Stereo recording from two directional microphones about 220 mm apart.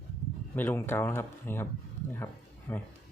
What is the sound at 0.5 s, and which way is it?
Speech, 10° left (ahead or behind).